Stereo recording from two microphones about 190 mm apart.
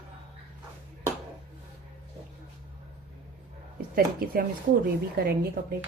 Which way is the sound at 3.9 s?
50° right (ahead or behind).